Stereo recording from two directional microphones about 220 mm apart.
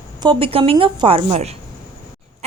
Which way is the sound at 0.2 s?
20° right (ahead or behind).